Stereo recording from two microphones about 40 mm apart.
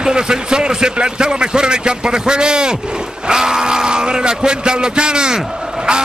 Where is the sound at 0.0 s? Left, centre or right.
Centre.